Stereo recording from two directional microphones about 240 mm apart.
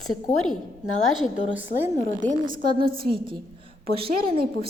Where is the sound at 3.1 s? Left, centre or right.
Right.